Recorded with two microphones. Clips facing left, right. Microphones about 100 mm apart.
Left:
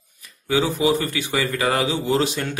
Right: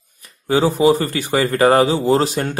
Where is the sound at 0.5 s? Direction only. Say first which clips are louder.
Right 5 dB; 40° right (ahead or behind).